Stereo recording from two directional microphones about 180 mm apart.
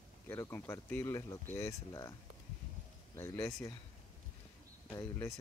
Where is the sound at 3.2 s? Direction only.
15° left (ahead or behind).